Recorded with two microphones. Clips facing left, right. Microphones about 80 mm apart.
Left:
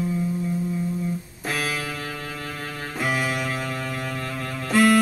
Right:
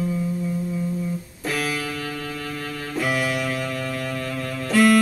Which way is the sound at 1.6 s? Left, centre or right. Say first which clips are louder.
Right 2 dB; centre.